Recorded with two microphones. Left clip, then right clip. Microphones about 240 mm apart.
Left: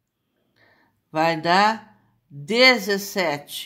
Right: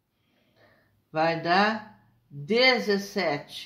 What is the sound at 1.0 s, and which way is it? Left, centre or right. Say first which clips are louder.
Speech: left 4 dB; left.